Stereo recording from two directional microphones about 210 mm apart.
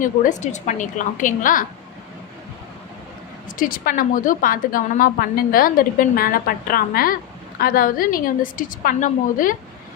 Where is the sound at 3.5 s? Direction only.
40° left (ahead or behind).